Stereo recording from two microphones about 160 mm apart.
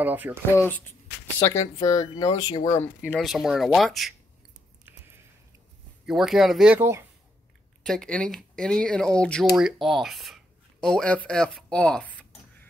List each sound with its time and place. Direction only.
0.0 s speech: 10° right (ahead or behind)
0.6 s speech: 10° left (ahead or behind)
3.1 s speech: centre (ahead or behind)
6.0 s speech: 5° right (ahead or behind)
7.8 s speech: 5° left (ahead or behind)